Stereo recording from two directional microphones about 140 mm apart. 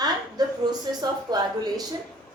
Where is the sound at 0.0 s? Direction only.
30° right (ahead or behind).